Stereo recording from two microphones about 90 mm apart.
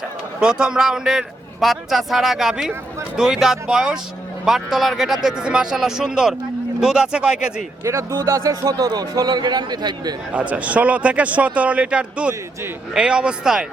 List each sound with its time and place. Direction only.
0.3 s a man's voice: 10° right (ahead or behind)
7.9 s a man's voice: 35° right (ahead or behind); by 10.2 s 50° right (ahead or behind)
10.3 s a man's voice: 15° right (ahead or behind)